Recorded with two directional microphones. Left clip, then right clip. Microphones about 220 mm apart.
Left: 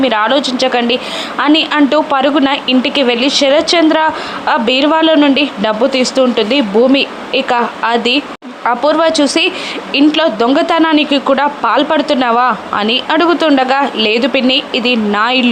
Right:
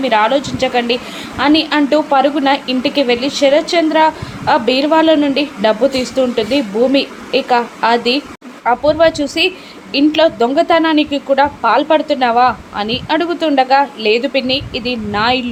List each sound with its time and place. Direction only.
0.0 s a woman's voice: 15° left (ahead or behind)